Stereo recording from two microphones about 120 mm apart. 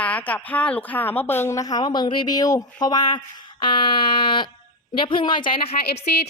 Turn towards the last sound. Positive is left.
turn(degrees=55)  # may be behind; listen again after turning